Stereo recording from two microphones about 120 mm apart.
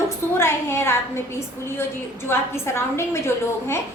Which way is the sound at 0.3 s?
20° left (ahead or behind).